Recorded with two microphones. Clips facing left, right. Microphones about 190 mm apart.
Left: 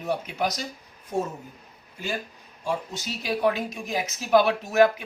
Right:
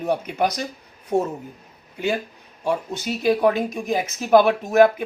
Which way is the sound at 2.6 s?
60° right (ahead or behind).